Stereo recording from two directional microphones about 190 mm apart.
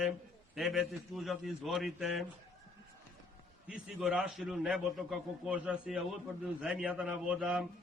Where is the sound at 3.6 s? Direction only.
5° right (ahead or behind).